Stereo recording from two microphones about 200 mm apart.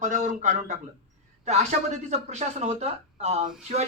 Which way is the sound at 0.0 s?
40° right (ahead or behind).